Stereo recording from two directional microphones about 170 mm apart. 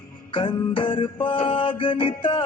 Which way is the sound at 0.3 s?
30° left (ahead or behind).